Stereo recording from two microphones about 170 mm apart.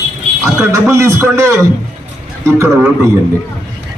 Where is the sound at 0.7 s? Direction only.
15° right (ahead or behind).